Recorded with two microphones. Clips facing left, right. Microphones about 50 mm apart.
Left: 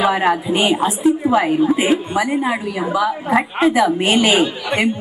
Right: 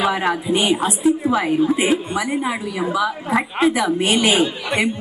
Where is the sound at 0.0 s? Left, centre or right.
Centre.